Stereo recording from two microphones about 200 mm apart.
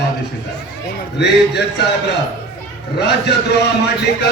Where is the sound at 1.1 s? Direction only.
60° left (ahead or behind).